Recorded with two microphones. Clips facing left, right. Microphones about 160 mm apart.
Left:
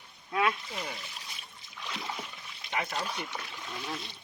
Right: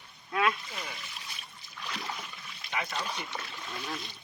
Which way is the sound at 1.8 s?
20° left (ahead or behind).